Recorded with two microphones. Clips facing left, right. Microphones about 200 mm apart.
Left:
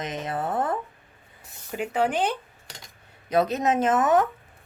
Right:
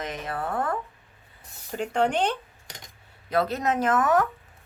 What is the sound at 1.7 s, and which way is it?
Speech, 5° left (ahead or behind).